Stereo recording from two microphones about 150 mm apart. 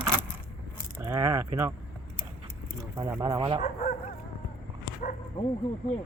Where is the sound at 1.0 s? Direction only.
15° right (ahead or behind).